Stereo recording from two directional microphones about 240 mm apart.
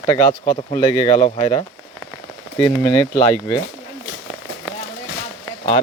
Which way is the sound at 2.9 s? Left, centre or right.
Centre.